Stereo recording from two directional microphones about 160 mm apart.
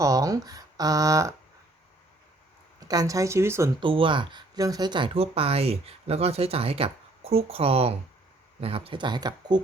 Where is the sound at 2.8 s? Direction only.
20° right (ahead or behind).